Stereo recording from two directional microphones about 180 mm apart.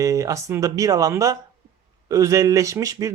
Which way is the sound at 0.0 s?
15° right (ahead or behind).